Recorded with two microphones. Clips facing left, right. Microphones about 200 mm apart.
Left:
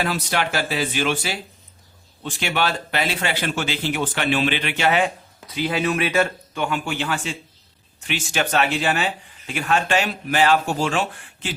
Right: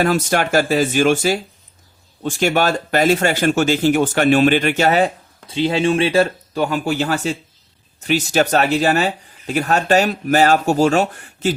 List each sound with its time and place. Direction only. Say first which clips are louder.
0.0 s speech: right 7 dB; 45° right (ahead or behind)